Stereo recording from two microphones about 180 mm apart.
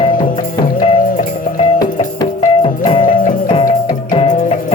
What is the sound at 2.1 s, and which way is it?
Music, 25° left (ahead or behind).